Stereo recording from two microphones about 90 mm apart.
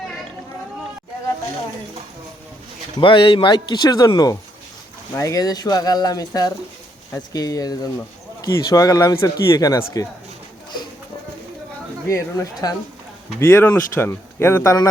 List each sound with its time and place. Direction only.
3.0 s speech: 65° left (ahead or behind); by 10.1 s 40° left (ahead or behind)
12.0 s speech: 35° left (ahead or behind)
13.4 s speech: 25° left (ahead or behind)